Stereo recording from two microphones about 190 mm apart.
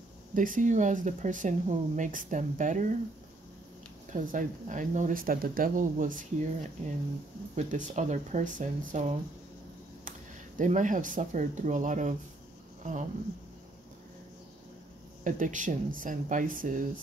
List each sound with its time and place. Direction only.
0.3 s speech: 45° right (ahead or behind)
4.1 s speech: 45° right (ahead or behind)
10.6 s speech: 40° right (ahead or behind)
15.2 s speech: 45° right (ahead or behind)